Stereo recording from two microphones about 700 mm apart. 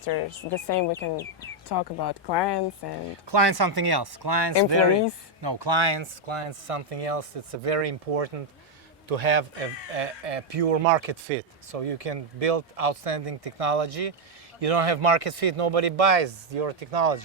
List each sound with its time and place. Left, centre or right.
0.0 s speech: left
1.6 s speech: left
3.1 s speech: right